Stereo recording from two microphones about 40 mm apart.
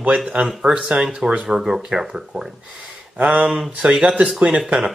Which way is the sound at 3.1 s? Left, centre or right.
Right.